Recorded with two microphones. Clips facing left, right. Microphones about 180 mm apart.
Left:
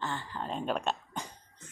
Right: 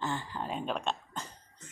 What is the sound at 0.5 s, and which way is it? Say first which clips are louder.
Speech: left 2 dB; 5° left (ahead or behind).